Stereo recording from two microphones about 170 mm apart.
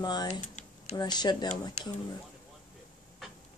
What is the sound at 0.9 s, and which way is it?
Speech, 25° left (ahead or behind).